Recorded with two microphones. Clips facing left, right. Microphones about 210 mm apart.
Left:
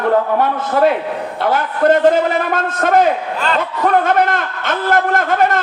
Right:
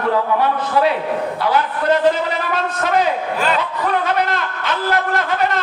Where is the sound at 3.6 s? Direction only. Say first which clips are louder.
Left 5 dB; 50° left (ahead or behind).